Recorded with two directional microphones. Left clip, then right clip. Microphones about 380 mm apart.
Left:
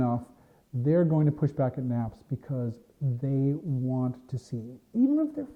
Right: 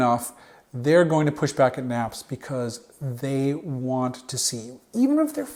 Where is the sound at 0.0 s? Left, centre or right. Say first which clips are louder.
Right 9 dB; centre.